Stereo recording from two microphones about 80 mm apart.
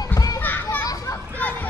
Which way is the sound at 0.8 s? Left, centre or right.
Left.